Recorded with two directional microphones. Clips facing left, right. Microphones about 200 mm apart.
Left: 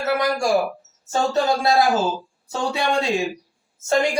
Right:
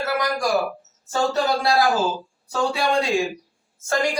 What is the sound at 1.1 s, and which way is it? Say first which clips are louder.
Speech: left 1 dB; 25° left (ahead or behind).